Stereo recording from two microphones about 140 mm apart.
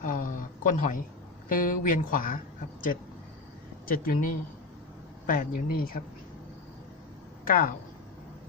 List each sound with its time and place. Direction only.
0.0 s a sound: 75° left (ahead or behind)
1.5 s speech: 80° left
3.8 s speech: 90° left
7.4 s speech: 90° left